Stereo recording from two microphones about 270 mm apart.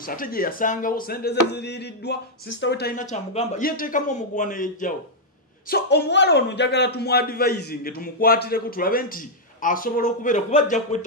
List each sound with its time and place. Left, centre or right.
0.0 s speech: left